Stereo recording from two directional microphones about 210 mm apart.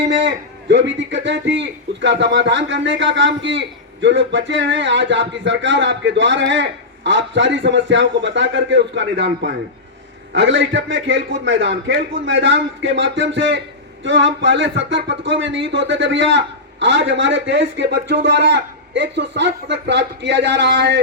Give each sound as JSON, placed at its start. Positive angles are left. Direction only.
{"t": 0.0, "sound": "speech", "side_deg": -60}
{"t": 10.3, "sound": "speech", "side_deg": -60}